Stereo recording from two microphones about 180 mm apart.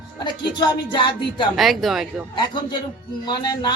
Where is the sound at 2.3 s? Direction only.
25° left (ahead or behind).